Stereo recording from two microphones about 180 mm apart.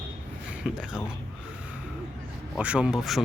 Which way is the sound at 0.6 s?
5° right (ahead or behind).